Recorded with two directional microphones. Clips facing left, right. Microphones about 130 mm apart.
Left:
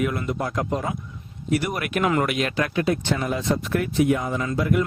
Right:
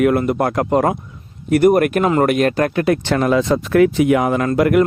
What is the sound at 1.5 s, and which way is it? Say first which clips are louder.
Speech: right 12 dB; 50° right (ahead or behind).